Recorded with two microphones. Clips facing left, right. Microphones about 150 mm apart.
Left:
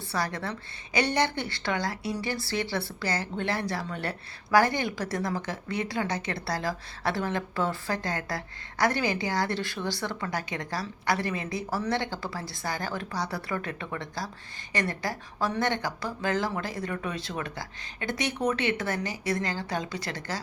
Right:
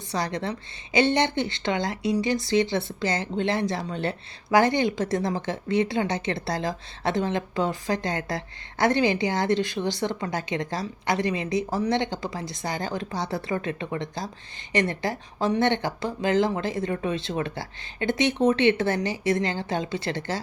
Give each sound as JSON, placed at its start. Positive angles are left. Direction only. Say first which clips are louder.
{"t": 0.1, "sound": "a woman's voice", "louder": "right 3 dB", "side_deg": -20}